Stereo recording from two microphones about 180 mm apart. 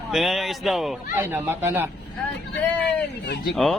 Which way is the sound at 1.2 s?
15° right (ahead or behind).